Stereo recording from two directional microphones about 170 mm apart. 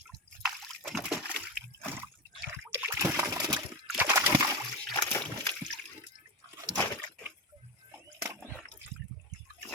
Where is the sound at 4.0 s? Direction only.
20° right (ahead or behind).